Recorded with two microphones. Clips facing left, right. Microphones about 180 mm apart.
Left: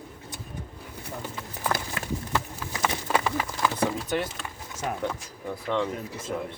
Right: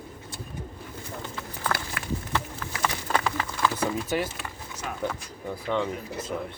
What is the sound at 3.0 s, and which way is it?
Run, 10° left (ahead or behind).